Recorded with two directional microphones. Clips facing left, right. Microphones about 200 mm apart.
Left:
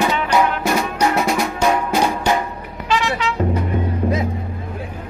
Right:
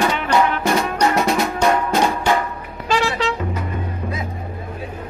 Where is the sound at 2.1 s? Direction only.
15° left (ahead or behind).